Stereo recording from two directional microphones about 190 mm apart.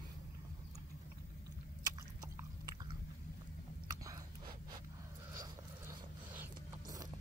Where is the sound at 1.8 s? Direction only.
20° right (ahead or behind).